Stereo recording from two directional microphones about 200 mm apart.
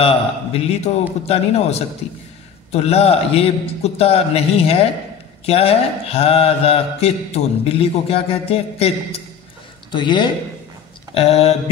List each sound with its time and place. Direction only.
0.0 s a man's voice: 30° left (ahead or behind)
5.4 s mantra: 30° left (ahead or behind)
11.1 s a man's voice: 30° left (ahead or behind)